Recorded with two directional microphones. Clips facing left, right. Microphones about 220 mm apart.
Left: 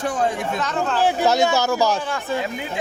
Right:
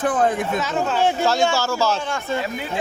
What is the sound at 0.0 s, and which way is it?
Speech, 55° right (ahead or behind).